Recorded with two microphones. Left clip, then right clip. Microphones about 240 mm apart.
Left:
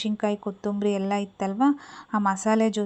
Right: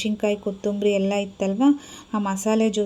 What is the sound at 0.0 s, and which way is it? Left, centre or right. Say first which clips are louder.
A woman's voice: right 4 dB; centre.